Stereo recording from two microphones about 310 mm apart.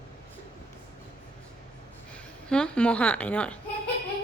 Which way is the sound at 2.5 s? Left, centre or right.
Centre.